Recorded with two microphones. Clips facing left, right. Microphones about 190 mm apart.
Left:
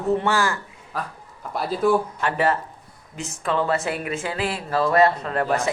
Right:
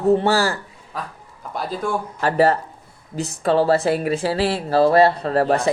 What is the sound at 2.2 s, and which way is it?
Speech, 35° right (ahead or behind).